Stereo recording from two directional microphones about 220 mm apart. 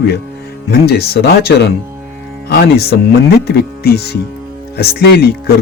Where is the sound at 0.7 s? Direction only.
50° left (ahead or behind).